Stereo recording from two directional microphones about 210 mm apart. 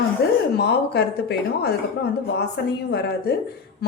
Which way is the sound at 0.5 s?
50° left (ahead or behind).